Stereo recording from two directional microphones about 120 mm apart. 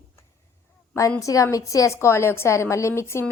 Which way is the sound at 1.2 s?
30° left (ahead or behind).